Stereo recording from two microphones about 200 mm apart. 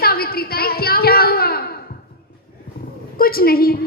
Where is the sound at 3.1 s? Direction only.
50° left (ahead or behind).